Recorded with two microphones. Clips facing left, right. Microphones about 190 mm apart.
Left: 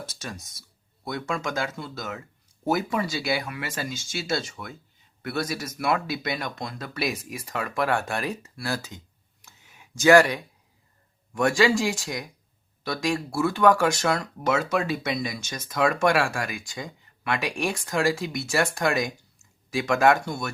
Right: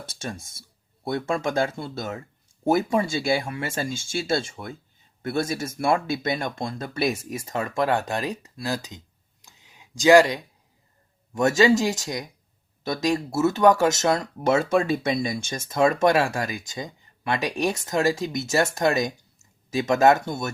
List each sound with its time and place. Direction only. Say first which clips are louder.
0.1 s speech: right 4 dB; 30° right (ahead or behind)
9.4 s a sound: even; 15° right (ahead or behind)
11.3 s speech: right 3 dB; 20° right (ahead or behind)